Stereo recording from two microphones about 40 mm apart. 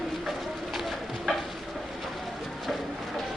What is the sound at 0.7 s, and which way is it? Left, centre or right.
Clip-clop, centre.